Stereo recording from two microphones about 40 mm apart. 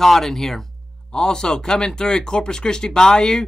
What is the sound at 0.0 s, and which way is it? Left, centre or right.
Speech, centre.